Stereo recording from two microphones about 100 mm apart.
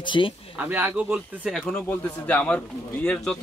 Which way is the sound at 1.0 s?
5° right (ahead or behind).